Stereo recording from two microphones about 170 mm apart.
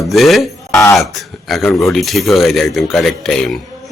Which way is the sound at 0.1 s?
Centre (ahead or behind).